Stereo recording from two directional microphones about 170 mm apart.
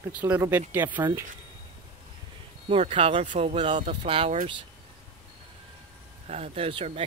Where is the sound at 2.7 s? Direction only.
35° right (ahead or behind).